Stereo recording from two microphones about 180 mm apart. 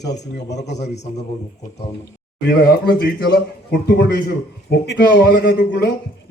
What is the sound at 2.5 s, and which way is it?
A man's voice, 60° left (ahead or behind).